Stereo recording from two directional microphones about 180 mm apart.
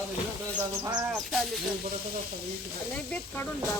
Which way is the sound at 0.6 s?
20° right (ahead or behind).